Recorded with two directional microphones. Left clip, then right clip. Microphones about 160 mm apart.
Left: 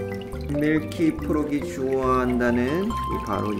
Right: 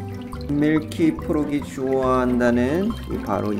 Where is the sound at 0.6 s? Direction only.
15° right (ahead or behind).